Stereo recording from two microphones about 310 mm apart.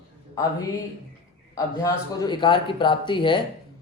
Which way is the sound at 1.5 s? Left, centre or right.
Centre.